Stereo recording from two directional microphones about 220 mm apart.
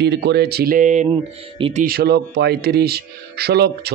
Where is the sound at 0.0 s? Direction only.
50° right (ahead or behind).